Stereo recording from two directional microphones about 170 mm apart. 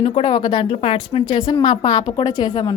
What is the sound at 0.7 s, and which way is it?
A woman's voice, 35° left (ahead or behind).